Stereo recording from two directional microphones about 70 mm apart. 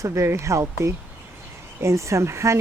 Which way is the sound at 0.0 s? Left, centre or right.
Right.